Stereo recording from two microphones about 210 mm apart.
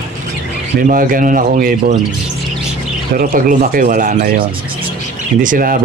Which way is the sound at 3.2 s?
45° right (ahead or behind).